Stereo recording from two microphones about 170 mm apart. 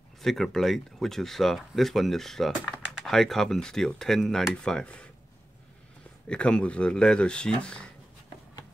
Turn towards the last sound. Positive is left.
turn(degrees=5)  # may be behind; listen again after turning